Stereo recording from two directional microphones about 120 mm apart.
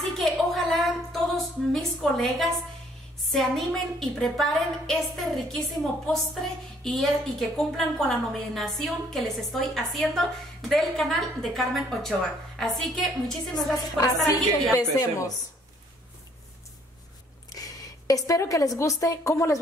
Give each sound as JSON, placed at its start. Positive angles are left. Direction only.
{"t": 0.0, "sound": "a sound", "side_deg": 0}
{"t": 3.3, "sound": "a woman's voice", "side_deg": 0}
{"t": 6.8, "sound": "a woman's voice", "side_deg": 0}
{"t": 13.9, "sound": "a woman's voice", "side_deg": 25}
{"t": 17.5, "sound": "a woman's voice", "side_deg": 30}